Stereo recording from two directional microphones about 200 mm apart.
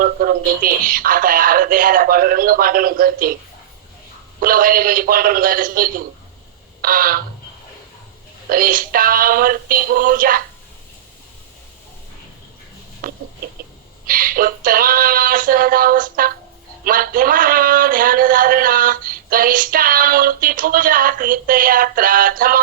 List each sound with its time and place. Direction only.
0.0 s speech: 45° right (ahead or behind)
4.4 s speech: 45° right (ahead or behind)
8.4 s speech: 45° right (ahead or behind)
13.0 s chicken: 45° right (ahead or behind)
14.1 s speech: 45° right (ahead or behind)